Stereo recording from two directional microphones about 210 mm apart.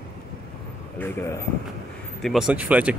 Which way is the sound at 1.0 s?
10° left (ahead or behind).